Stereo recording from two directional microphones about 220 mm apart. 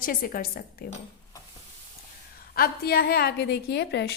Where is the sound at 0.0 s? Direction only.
40° left (ahead or behind).